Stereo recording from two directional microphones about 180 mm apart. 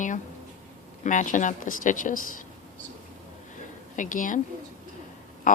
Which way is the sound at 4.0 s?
45° left (ahead or behind).